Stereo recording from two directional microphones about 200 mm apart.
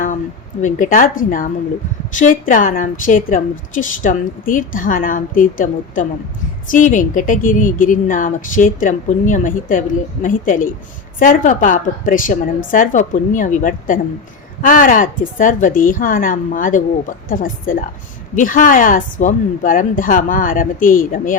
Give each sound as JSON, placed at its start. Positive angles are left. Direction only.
{"t": 0.6, "sound": "a woman's voice", "side_deg": 40}